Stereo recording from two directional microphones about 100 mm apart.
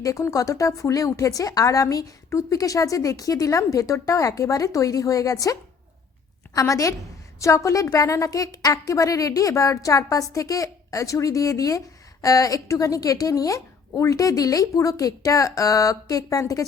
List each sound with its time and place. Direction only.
0.0 s a woman's voice: 35° left (ahead or behind)